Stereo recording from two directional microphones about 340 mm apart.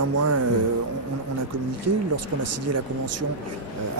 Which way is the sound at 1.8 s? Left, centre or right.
Right.